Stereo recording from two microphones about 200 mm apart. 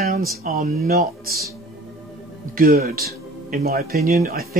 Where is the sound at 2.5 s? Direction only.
50° right (ahead or behind).